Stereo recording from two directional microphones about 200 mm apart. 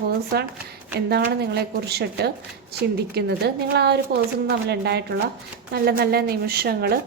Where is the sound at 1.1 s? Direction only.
55° right (ahead or behind).